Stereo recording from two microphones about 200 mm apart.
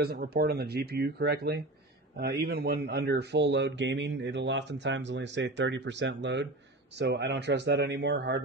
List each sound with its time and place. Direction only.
0.0 s speech: 50° right (ahead or behind)